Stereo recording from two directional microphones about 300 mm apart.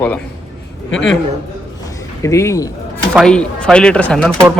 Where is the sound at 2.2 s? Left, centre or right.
Centre.